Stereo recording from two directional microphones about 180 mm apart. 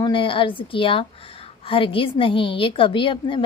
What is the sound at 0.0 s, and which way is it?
A woman's voice, 30° left (ahead or behind).